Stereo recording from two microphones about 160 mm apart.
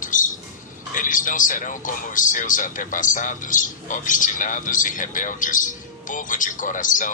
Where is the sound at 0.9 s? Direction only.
55° left (ahead or behind).